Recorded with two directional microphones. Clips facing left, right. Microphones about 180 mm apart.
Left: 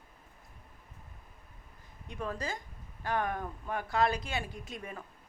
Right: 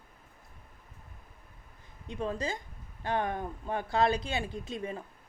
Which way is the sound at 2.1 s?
25° right (ahead or behind).